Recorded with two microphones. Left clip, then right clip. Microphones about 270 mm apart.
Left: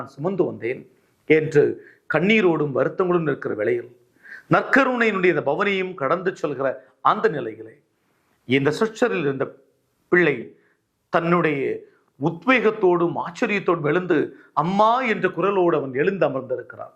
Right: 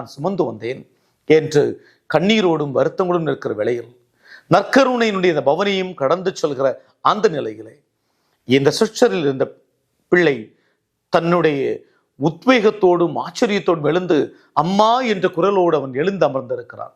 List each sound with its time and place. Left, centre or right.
0.0 s speech: right